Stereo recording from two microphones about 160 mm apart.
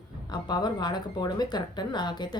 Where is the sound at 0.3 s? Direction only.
25° left (ahead or behind).